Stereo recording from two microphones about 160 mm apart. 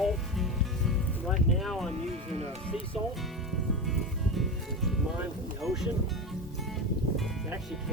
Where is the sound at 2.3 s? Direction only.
40° right (ahead or behind).